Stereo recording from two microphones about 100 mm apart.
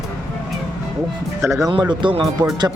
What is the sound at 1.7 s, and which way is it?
Speech, 50° right (ahead or behind).